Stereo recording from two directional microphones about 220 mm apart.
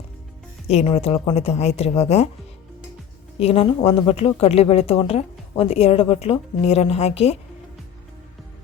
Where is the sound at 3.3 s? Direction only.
25° left (ahead or behind).